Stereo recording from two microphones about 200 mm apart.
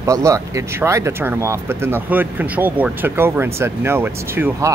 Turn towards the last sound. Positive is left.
turn(degrees=-10)  # may be behind; listen again after turning